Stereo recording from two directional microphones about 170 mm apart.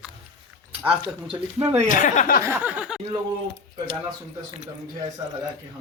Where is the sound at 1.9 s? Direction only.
50° left (ahead or behind).